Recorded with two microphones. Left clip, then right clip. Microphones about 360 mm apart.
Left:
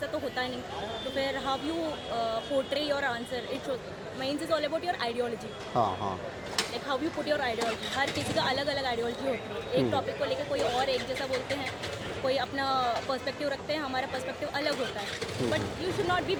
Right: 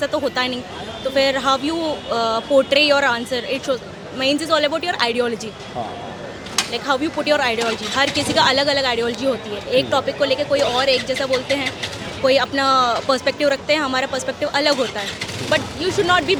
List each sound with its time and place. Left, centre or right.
0.0 s speech: right
6.7 s a woman's voice: right